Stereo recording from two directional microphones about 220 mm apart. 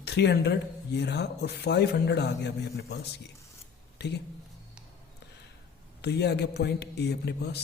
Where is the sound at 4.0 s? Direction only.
50° left (ahead or behind).